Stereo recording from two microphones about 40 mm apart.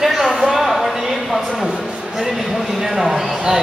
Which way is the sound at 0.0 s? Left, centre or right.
Centre.